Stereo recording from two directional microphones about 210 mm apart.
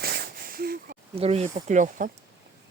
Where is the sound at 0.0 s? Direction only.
45° right (ahead or behind).